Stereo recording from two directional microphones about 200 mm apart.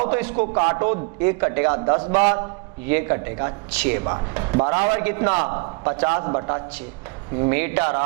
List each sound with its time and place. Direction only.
0.1 s a man's voice: 10° right (ahead or behind)
2.0 s a man's voice: 35° right (ahead or behind)
2.3 s a man's voice: 15° right (ahead or behind)
4.9 s a man's voice: 15° right (ahead or behind)